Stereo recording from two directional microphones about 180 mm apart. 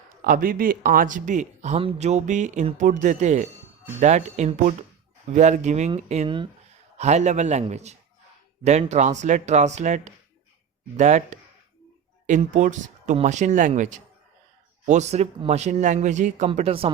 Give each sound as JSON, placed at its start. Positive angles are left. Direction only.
{"t": 0.3, "sound": "a man's voice", "side_deg": -50}
{"t": 6.9, "sound": "a man's voice", "side_deg": -40}